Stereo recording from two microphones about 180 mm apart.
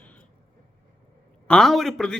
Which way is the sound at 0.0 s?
5° left (ahead or behind).